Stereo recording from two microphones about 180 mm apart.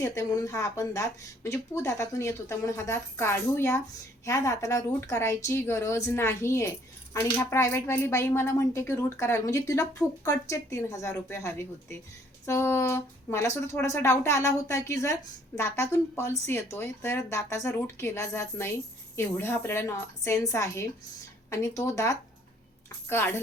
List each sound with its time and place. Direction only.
0.0 s speech: 15° left (ahead or behind)